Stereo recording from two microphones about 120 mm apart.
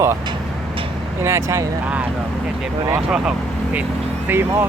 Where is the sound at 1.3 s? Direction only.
25° right (ahead or behind).